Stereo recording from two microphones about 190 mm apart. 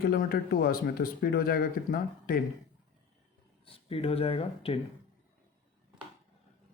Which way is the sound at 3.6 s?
30° left (ahead or behind).